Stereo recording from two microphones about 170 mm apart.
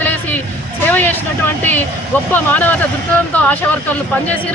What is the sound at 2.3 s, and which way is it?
Speech, 10° left (ahead or behind).